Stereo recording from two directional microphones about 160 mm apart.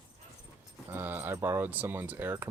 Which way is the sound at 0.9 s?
10° right (ahead or behind).